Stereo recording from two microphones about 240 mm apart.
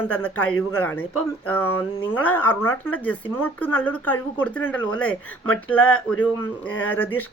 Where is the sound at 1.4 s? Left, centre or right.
Centre.